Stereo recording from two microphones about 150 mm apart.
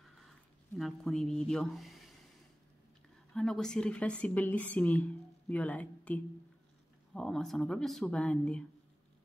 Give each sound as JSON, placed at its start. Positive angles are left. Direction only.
{"t": 0.7, "sound": "speech", "side_deg": 0}
{"t": 3.3, "sound": "speech", "side_deg": 5}